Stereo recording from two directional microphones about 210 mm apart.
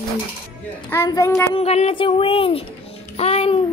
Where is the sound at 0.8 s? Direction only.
15° left (ahead or behind).